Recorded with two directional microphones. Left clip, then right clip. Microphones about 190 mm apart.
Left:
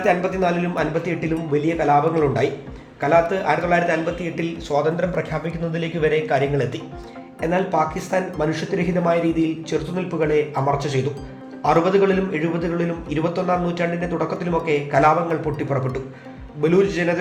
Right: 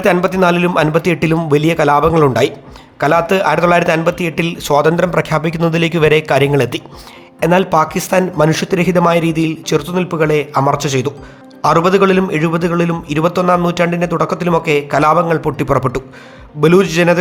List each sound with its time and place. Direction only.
0.0 s a man's voice: 45° right (ahead or behind)